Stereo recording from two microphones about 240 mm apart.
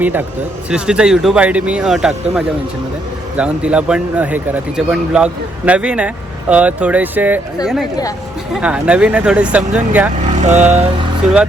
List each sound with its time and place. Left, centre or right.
0.0 s speech: centre
10.3 s speech: right